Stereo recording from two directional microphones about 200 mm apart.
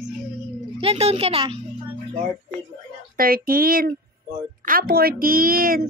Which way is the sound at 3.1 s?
45° right (ahead or behind).